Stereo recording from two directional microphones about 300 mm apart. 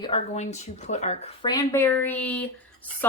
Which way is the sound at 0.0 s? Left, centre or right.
Centre.